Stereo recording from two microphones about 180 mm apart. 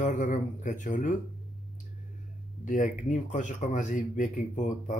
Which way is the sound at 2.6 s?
45° left (ahead or behind).